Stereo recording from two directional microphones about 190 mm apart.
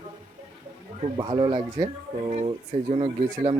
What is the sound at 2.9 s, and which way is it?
Speech, 30° right (ahead or behind).